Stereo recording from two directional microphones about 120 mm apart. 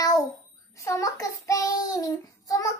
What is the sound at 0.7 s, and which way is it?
Child singing, 25° left (ahead or behind).